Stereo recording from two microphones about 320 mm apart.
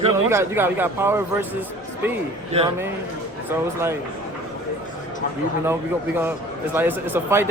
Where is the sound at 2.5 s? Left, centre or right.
Centre.